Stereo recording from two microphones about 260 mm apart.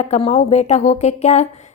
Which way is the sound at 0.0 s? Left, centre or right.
Left.